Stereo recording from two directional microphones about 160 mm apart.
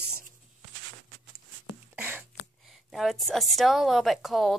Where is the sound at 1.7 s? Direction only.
10° right (ahead or behind).